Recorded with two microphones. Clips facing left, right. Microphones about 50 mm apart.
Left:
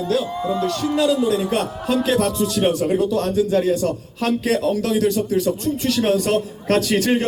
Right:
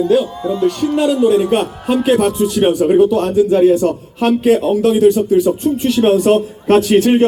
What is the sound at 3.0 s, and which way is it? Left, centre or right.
A man's voice, right.